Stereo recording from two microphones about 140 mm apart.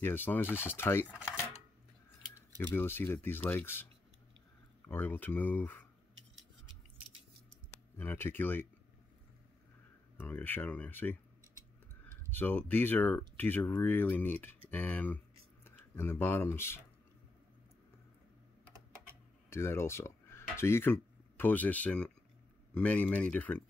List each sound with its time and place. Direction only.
0.0 s speech: 15° left (ahead or behind)
2.6 s speech: 15° left (ahead or behind)
4.8 s speech: 15° left (ahead or behind)
8.0 s speech: 15° left (ahead or behind)
10.1 s speech: 15° left (ahead or behind)
12.3 s speech: 15° left (ahead or behind)
19.5 s speech: 20° left (ahead or behind)